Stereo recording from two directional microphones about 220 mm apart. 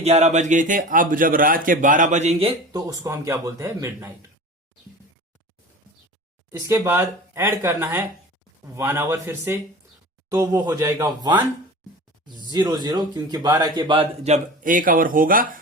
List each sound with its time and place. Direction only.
0.0 s a man's voice: 30° right (ahead or behind)
2.8 s speech: 15° right (ahead or behind)
6.5 s speech: 15° right (ahead or behind); by 15.6 s 40° right (ahead or behind)